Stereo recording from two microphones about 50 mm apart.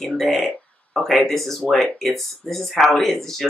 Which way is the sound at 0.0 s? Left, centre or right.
Centre.